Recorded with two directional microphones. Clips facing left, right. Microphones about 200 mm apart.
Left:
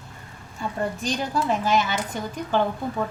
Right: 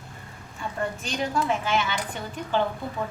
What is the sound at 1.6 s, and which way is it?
Speech, 40° left (ahead or behind).